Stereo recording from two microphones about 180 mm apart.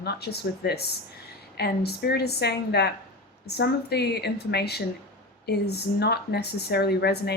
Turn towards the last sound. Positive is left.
turn(degrees=65)  # may be behind; listen again after turning